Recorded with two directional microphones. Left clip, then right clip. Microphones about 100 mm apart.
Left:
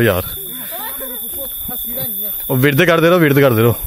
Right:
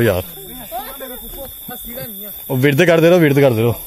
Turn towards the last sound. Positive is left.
turn(degrees=20)  # may be behind; listen again after turning